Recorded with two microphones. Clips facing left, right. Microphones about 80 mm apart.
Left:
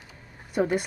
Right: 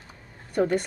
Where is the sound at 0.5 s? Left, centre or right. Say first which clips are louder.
Right 1 dB; centre.